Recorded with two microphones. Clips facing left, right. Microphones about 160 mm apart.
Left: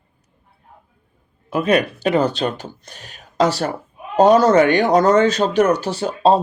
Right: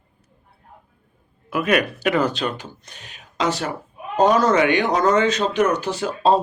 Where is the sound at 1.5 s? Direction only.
30° left (ahead or behind).